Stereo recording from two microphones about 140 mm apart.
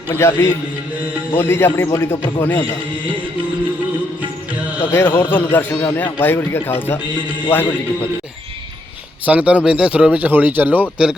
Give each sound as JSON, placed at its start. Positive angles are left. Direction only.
{"t": 0.1, "sound": "a man's voice", "side_deg": 20}
{"t": 4.8, "sound": "a man's voice", "side_deg": 15}
{"t": 9.2, "sound": "speech", "side_deg": -10}